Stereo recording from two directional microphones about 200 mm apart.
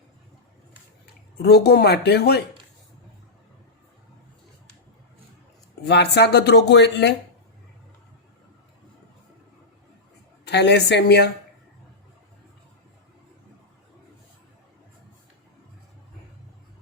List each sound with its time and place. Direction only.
1.4 s speech: 55° left (ahead or behind)
5.8 s speech: 55° left (ahead or behind)
10.4 s speech: 55° left (ahead or behind)